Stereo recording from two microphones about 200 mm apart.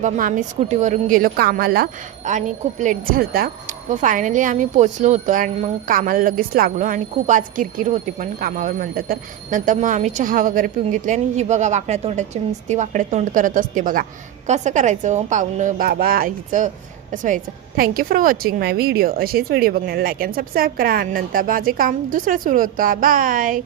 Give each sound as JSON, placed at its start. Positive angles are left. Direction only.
{"t": 0.0, "sound": "a woman's voice", "side_deg": -40}